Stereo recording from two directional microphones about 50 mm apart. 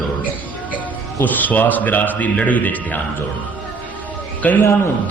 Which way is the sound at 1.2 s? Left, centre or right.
Left.